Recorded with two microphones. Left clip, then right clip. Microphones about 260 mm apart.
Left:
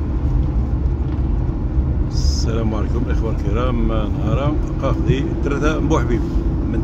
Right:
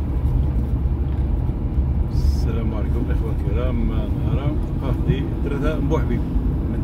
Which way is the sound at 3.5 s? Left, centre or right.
Centre.